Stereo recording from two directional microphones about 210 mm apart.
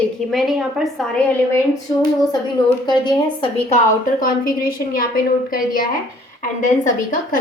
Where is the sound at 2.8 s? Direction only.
25° left (ahead or behind).